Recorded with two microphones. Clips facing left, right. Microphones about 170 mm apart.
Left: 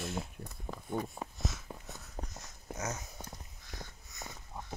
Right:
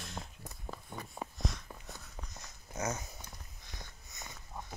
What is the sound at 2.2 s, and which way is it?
Dog, 40° left (ahead or behind).